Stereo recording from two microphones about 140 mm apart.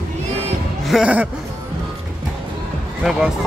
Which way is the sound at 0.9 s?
5° right (ahead or behind).